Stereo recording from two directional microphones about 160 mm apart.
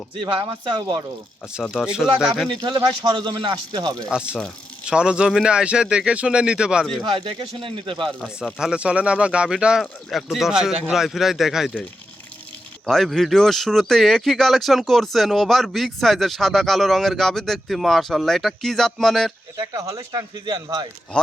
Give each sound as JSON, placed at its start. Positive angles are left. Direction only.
{"t": 0.2, "sound": "speech", "side_deg": -30}
{"t": 1.7, "sound": "speech", "side_deg": -5}
{"t": 2.5, "sound": "speech", "side_deg": -30}
{"t": 4.0, "sound": "speech", "side_deg": -5}
{"t": 7.0, "sound": "speech", "side_deg": -30}
{"t": 8.5, "sound": "speech", "side_deg": -5}
{"t": 19.5, "sound": "speech", "side_deg": -20}